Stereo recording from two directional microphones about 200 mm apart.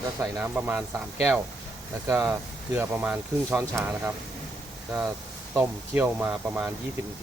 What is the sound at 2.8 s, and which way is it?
Speech, 5° right (ahead or behind).